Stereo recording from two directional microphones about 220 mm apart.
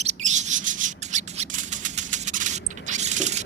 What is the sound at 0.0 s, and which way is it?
Rub, 30° right (ahead or behind).